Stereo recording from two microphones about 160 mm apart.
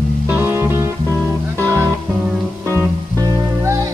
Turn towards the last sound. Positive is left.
turn(degrees=-20)  # may be behind; listen again after turning